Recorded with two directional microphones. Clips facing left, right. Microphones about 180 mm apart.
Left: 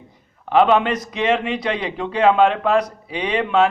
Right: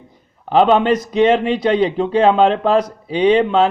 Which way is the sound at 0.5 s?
30° right (ahead or behind).